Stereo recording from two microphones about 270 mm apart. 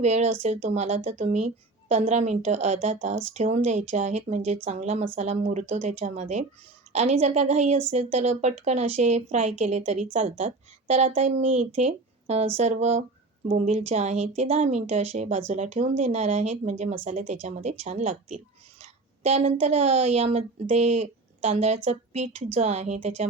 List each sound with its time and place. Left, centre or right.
0.0 s a woman's voice: right